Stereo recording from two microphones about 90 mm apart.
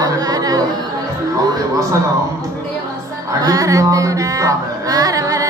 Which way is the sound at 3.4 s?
40° right (ahead or behind).